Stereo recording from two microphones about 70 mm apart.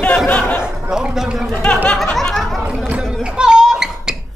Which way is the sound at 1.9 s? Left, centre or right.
Centre.